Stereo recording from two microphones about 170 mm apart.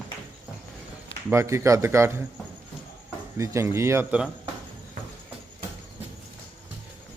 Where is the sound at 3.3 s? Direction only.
15° right (ahead or behind).